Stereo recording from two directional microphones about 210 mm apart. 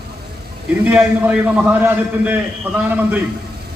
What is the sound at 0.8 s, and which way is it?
A man's voice, 5° right (ahead or behind).